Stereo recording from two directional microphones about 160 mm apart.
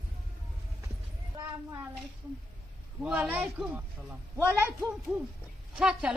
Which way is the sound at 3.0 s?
10° right (ahead or behind).